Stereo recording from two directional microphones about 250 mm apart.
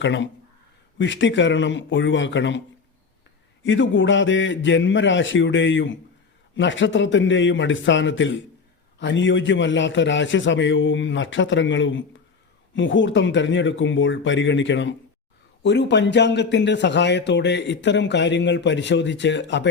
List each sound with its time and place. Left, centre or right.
0.0 s a man's voice: left
3.6 s a man's voice: left